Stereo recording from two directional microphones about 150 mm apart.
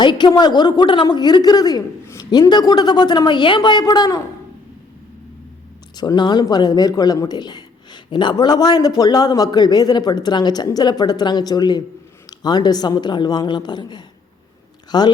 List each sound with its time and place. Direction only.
0.0 s a man's voice: 30° left (ahead or behind)
6.0 s a man's voice: 30° left (ahead or behind)